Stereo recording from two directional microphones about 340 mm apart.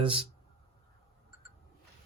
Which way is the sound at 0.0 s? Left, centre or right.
Centre.